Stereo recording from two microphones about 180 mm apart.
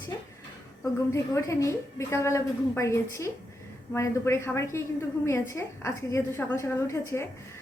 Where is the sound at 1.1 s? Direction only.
15° left (ahead or behind).